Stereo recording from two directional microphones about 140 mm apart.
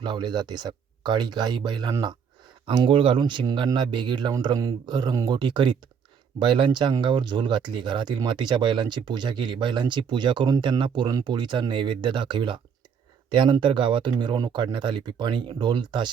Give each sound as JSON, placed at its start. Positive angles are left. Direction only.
{"t": 0.0, "sound": "speech", "side_deg": -35}